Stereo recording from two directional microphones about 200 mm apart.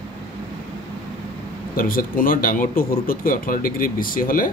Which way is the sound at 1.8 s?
45° left (ahead or behind).